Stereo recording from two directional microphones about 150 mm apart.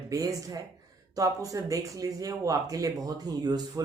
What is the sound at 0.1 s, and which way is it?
Speech, 25° right (ahead or behind).